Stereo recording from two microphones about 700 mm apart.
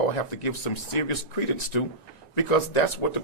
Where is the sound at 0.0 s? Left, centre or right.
Left.